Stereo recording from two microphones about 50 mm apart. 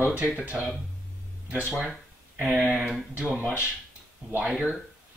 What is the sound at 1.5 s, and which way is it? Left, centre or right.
Speech, right.